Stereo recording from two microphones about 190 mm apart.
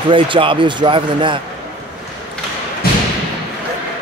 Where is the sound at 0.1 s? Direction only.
25° right (ahead or behind).